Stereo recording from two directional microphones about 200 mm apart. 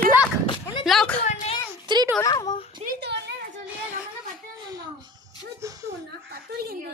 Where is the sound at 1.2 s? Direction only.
35° left (ahead or behind).